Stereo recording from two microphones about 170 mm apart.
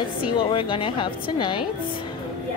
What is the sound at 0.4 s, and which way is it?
Speech, 30° left (ahead or behind).